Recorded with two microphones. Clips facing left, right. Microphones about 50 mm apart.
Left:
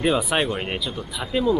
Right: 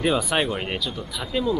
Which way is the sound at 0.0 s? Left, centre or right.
Centre.